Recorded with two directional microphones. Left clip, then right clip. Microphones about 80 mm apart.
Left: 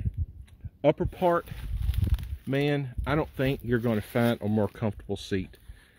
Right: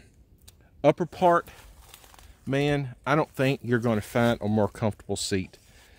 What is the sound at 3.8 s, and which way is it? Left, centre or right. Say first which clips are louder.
Speech: right 3 dB; right.